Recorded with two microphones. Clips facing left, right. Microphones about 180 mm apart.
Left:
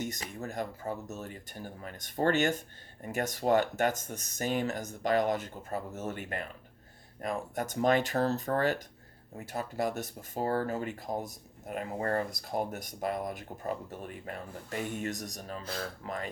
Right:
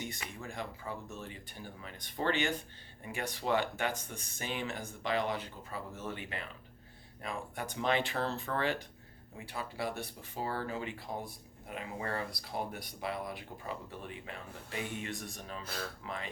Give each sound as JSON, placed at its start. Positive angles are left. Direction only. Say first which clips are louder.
{"t": 0.0, "sound": "speech", "louder": "left 5 dB", "side_deg": 40}